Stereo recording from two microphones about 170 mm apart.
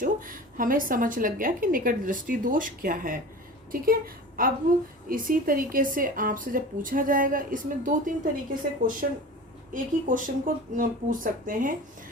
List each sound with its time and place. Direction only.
0.0 s a woman's voice: 55° right (ahead or behind)